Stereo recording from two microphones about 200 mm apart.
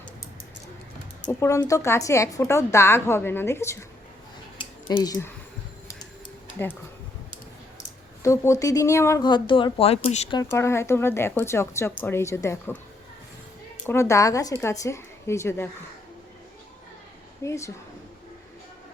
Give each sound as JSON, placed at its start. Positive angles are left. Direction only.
{"t": 1.2, "sound": "a woman's voice", "side_deg": 10}
{"t": 4.5, "sound": "a sound", "side_deg": 20}
{"t": 6.6, "sound": "a woman's voice", "side_deg": 10}
{"t": 8.2, "sound": "speech", "side_deg": 15}
{"t": 10.5, "sound": "a woman's voice", "side_deg": 15}
{"t": 13.8, "sound": "a woman's voice", "side_deg": 15}
{"t": 17.4, "sound": "a woman's voice", "side_deg": 15}